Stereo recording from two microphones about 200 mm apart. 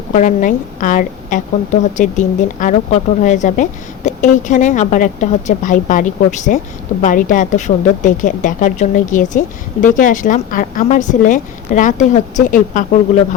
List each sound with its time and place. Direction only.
0.1 s a woman's voice: 40° left (ahead or behind)